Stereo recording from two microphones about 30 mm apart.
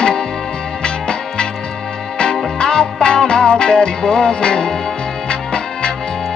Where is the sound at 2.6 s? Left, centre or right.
Left.